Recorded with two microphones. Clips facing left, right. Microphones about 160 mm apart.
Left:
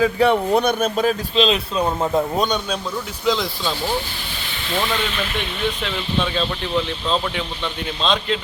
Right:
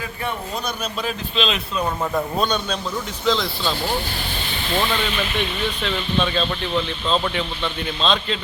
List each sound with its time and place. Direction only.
0.0 s speech: 85° left; by 3.7 s 10° left (ahead or behind)
5.8 s speech: 5° left (ahead or behind)